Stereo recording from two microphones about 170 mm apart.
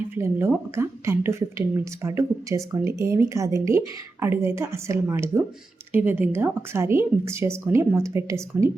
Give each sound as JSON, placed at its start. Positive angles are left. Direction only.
{"t": 0.2, "sound": "speech", "side_deg": -15}